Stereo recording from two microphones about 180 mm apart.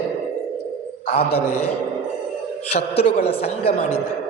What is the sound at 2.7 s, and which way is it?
A man's voice, 35° left (ahead or behind).